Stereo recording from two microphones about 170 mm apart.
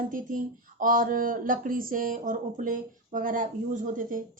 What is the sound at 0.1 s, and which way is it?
A woman's voice, 55° right (ahead or behind).